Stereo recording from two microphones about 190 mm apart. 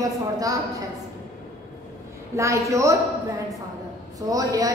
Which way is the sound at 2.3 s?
15° right (ahead or behind).